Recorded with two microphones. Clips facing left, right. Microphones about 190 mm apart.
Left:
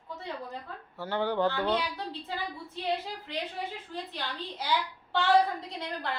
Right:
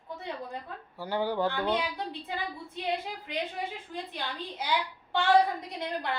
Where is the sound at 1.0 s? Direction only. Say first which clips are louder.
Left 1 dB; 10° right (ahead or behind).